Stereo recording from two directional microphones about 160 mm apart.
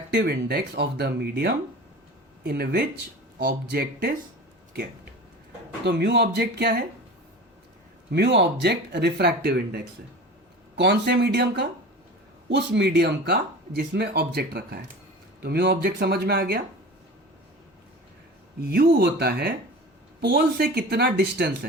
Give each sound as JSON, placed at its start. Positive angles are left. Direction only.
{"t": 0.1, "sound": "speech", "side_deg": -90}
{"t": 2.4, "sound": "speech", "side_deg": -80}
{"t": 5.8, "sound": "speech", "side_deg": -90}
{"t": 8.1, "sound": "speech", "side_deg": -90}
{"t": 18.6, "sound": "speech", "side_deg": -70}